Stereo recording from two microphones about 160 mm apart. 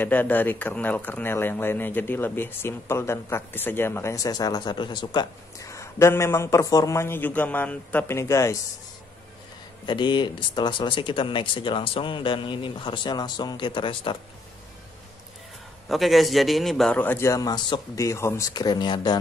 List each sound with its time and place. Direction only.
0.0 s speech: 10° left (ahead or behind)
9.8 s speech: 30° left (ahead or behind)
15.9 s speech: centre (ahead or behind); by 19.1 s 25° left (ahead or behind)